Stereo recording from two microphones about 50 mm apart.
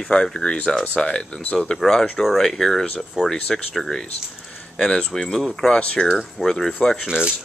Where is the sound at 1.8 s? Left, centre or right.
Centre.